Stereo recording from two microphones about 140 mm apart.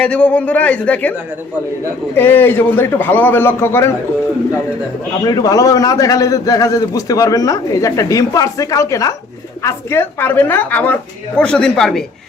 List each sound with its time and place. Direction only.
0.0 s a woman's voice: 10° left (ahead or behind)
2.1 s a woman's voice: 15° left (ahead or behind)
5.2 s a man's voice: 25° left (ahead or behind); by 12.0 s 5° left (ahead or behind)